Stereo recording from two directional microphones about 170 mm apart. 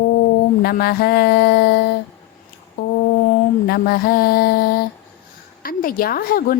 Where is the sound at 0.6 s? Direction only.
65° left (ahead or behind).